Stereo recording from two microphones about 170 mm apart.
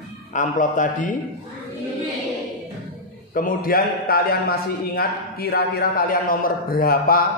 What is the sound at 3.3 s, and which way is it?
A man's voice, 55° left (ahead or behind).